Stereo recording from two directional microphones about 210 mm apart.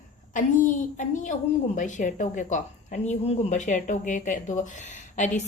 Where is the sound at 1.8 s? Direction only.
35° left (ahead or behind).